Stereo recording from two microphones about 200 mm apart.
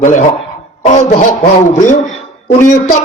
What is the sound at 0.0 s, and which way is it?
A man's voice, 40° left (ahead or behind).